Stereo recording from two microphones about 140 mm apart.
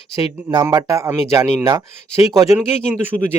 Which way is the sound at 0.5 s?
30° right (ahead or behind).